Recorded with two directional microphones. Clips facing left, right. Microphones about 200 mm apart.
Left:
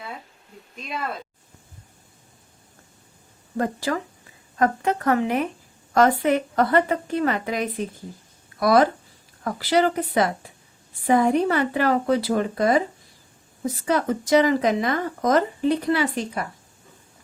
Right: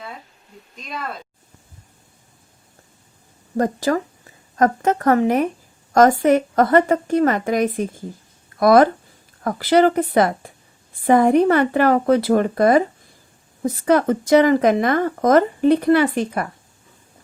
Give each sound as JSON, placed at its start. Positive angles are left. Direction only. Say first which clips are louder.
{"t": 3.6, "sound": "a woman's voice", "louder": "right 5 dB", "side_deg": -40}